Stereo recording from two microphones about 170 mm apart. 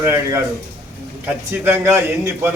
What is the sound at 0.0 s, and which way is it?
Speech, 15° right (ahead or behind).